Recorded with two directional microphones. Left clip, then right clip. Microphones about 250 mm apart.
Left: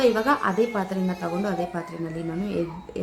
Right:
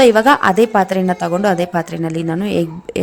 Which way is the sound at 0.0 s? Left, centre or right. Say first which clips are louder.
Right 11 dB; right.